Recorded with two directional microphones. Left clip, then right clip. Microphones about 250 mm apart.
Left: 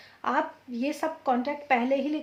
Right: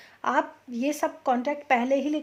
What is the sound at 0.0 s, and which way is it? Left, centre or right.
A woman's voice, right.